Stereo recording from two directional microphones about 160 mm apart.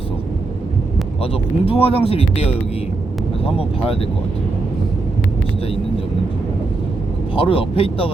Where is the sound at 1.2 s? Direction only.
40° left (ahead or behind).